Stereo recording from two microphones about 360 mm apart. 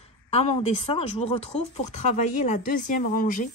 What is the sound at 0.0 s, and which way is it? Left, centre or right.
A woman's voice, centre.